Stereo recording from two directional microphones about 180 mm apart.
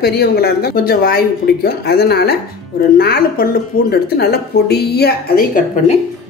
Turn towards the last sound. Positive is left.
turn(degrees=50)  # may be behind; listen again after turning